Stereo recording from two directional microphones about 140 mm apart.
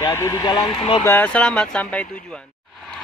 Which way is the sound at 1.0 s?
15° left (ahead or behind).